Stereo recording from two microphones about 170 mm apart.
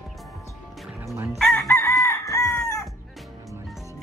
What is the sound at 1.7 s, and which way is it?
Chicken, 15° left (ahead or behind).